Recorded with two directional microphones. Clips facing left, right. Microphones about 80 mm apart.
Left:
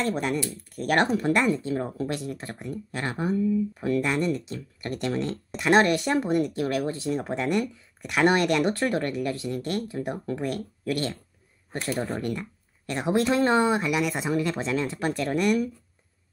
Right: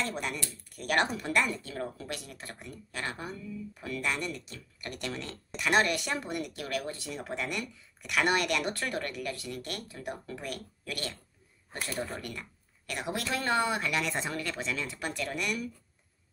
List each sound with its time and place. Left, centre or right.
0.0 s speech: left
12.2 s speech: left
13.8 s speech: centre
14.3 s speech: left
14.6 s speech: left